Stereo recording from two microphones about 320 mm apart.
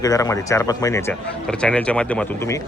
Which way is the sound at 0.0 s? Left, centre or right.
Centre.